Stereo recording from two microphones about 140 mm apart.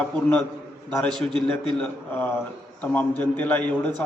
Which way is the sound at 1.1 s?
35° right (ahead or behind).